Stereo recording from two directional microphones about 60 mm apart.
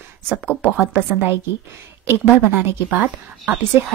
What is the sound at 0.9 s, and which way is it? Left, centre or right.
Speech, right.